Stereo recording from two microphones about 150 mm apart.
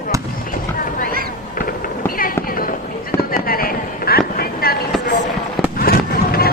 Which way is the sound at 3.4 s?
75° left (ahead or behind).